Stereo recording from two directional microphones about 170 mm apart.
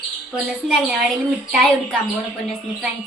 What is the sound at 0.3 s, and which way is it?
A woman's voice, centre (ahead or behind).